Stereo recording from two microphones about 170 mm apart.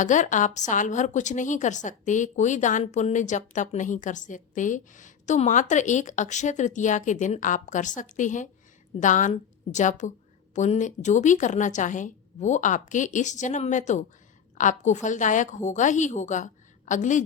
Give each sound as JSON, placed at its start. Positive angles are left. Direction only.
{"t": 0.0, "sound": "a woman's voice", "side_deg": 45}